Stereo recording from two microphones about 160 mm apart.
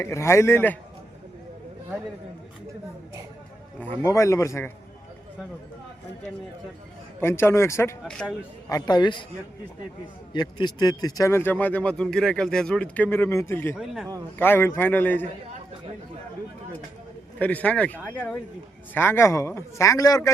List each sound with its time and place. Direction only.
0.0 s speech: 15° left (ahead or behind)
3.8 s speech: 15° left (ahead or behind)
7.2 s speech: 15° left (ahead or behind)
8.0 s a man's voice: 5° left (ahead or behind)
8.7 s speech: 25° left (ahead or behind)
10.3 s speech: 25° left (ahead or behind)
13.7 s a man's voice: centre (ahead or behind)
14.3 s speech: 15° left (ahead or behind)
17.4 s speech: 10° left (ahead or behind)